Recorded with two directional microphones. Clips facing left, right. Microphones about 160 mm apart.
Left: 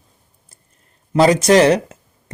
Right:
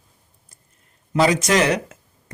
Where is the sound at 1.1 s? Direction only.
35° left (ahead or behind).